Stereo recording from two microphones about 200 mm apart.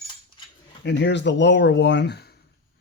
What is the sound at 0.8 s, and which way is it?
Speech, 60° left (ahead or behind).